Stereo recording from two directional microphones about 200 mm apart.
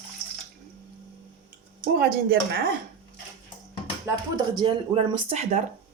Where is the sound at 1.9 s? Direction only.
50° right (ahead or behind).